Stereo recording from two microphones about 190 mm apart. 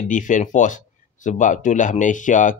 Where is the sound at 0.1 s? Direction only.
40° left (ahead or behind).